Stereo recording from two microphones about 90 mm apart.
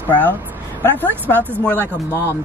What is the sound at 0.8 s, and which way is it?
Speech, 20° left (ahead or behind).